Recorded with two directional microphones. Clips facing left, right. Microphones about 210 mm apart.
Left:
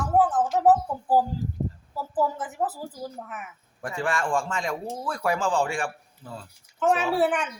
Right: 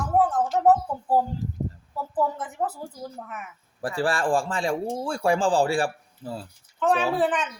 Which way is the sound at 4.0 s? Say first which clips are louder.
Right 3 dB; 35° right (ahead or behind).